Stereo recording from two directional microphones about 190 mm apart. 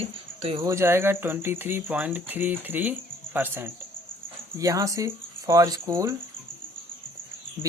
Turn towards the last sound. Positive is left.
turn(degrees=-15)  # may be behind; listen again after turning